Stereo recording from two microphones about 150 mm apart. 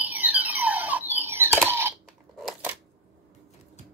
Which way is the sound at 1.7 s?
15° right (ahead or behind).